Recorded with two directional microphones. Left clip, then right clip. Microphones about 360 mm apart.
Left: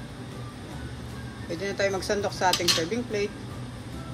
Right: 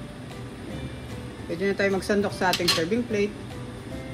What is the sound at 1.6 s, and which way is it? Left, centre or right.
Speech, centre.